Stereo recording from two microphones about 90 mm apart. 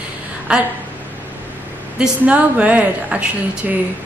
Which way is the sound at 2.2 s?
15° right (ahead or behind).